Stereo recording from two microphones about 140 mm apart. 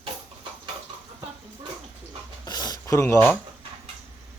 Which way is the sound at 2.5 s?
30° left (ahead or behind).